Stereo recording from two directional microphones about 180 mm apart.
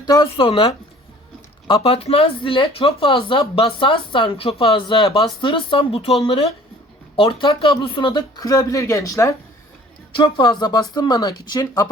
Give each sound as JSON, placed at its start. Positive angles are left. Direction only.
{"t": 0.0, "sound": "speech", "side_deg": 25}